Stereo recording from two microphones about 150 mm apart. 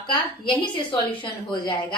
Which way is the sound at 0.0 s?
30° left (ahead or behind).